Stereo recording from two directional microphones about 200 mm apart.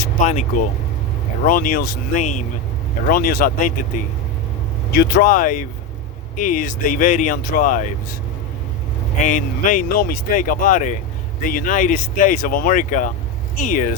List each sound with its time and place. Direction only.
0.0 s speech: 40° left (ahead or behind)
9.2 s speech: 40° left (ahead or behind)